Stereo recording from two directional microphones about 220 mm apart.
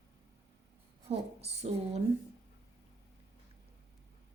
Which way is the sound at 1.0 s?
30° right (ahead or behind).